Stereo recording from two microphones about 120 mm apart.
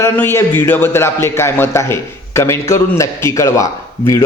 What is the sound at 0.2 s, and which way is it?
A man's voice, 20° left (ahead or behind).